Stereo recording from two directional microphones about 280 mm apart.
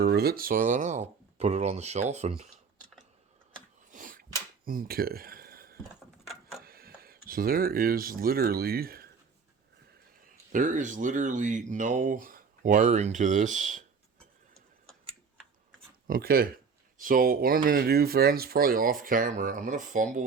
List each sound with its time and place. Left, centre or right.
0.0 s speech: right
3.9 s sneeze: right
4.6 s a sound: right
6.6 s speech: right
10.2 s speech: right
16.0 s speech: right